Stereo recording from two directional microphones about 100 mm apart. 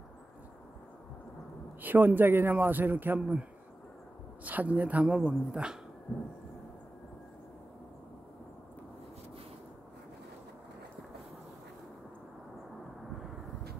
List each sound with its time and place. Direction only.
1.8 s a man's voice: 20° right (ahead or behind)
4.5 s a woman's voice: 15° right (ahead or behind)